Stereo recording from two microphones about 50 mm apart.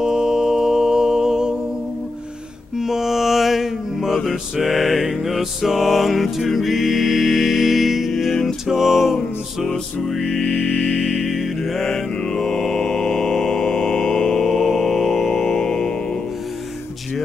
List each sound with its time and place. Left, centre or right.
0.0 s sine wave: centre
2.8 s mantra: centre
6.3 s music: centre
10.2 s music: left
11.1 s music: centre
11.9 s mantra: centre